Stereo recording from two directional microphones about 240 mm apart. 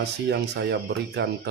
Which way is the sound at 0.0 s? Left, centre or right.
Right.